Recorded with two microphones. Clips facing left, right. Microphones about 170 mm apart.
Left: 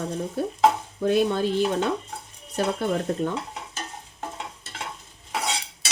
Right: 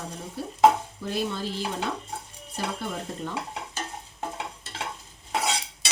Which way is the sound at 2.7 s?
55° left (ahead or behind).